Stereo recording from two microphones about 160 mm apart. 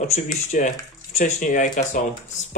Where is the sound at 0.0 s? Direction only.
45° left (ahead or behind).